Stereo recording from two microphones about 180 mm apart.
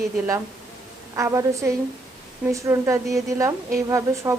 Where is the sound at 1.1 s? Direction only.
15° right (ahead or behind).